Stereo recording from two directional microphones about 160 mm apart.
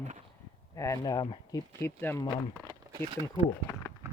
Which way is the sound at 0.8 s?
20° left (ahead or behind).